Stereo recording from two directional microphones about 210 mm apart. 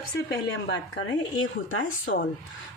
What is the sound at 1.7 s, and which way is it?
Speech, 65° left (ahead or behind).